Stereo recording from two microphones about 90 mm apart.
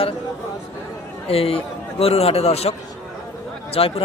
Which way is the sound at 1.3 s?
90° left.